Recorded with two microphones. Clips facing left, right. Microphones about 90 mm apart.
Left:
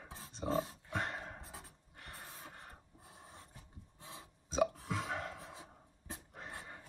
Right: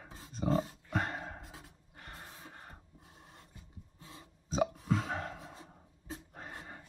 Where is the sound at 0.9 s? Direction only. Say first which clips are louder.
Right 4 dB; 40° right (ahead or behind).